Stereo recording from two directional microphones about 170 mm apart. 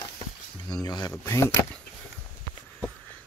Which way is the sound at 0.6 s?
25° left (ahead or behind).